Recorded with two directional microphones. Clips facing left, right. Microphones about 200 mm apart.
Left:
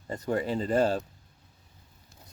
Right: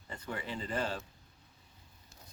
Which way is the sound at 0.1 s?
40° left (ahead or behind).